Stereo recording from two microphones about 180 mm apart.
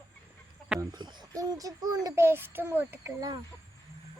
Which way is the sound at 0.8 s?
25° right (ahead or behind).